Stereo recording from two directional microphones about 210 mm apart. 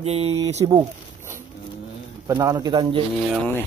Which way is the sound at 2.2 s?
15° right (ahead or behind).